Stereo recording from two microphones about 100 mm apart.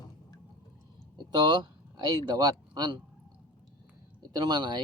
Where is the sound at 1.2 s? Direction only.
45° right (ahead or behind).